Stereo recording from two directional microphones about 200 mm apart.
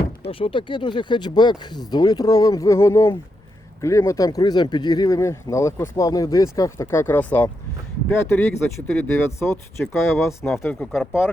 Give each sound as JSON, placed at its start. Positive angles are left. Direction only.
{"t": 0.3, "sound": "speech", "side_deg": 25}